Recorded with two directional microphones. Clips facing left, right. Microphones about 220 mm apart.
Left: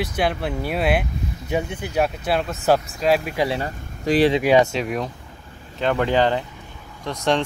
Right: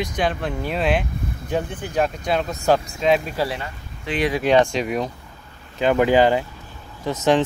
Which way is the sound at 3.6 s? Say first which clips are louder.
Left 6 dB; 35° left (ahead or behind).